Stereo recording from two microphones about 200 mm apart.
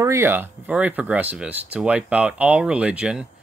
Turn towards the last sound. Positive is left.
turn(degrees=-5)  # may be behind; listen again after turning